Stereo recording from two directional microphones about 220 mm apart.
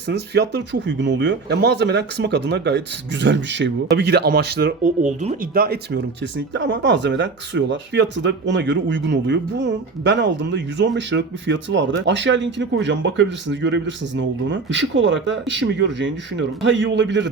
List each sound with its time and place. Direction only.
0.1 s speech: 50° right (ahead or behind)